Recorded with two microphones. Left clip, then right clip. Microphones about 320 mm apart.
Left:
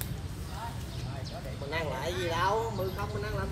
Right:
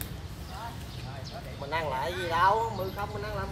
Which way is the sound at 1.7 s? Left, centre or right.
Centre.